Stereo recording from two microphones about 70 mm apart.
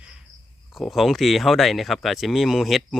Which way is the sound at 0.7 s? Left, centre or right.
Centre.